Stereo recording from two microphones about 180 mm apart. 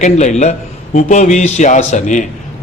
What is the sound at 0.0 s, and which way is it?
A man's voice, 40° left (ahead or behind).